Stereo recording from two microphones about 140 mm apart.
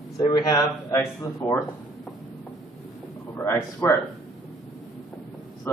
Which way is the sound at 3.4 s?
15° left (ahead or behind).